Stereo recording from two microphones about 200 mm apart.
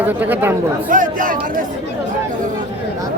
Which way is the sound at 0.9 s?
40° right (ahead or behind).